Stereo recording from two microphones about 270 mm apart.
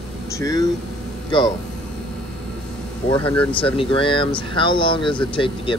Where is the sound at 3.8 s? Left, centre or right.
Centre.